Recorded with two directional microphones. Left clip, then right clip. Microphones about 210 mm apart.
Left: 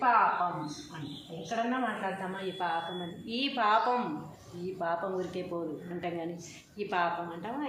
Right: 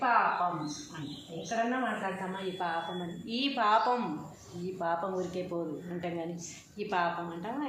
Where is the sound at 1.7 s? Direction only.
Centre (ahead or behind).